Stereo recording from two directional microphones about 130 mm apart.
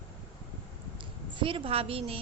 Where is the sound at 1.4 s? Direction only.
45° right (ahead or behind).